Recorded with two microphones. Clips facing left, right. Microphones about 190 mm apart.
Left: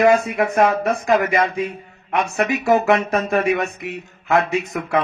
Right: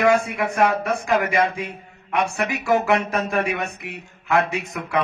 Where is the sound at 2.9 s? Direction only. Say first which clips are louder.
Left 3 dB; 45° left (ahead or behind).